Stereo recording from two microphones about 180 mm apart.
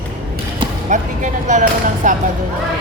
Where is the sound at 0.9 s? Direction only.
45° right (ahead or behind).